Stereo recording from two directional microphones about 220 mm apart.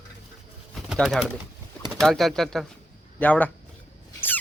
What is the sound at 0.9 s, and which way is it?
A man's voice, centre (ahead or behind).